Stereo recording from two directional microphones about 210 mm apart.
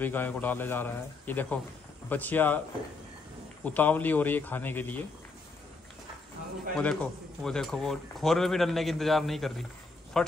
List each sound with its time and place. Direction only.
0.0 s a man's voice: 10° left (ahead or behind)
3.6 s a man's voice: 10° left (ahead or behind)
6.8 s speech: 5° left (ahead or behind)